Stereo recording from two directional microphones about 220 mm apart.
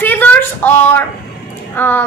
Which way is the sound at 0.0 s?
10° left (ahead or behind).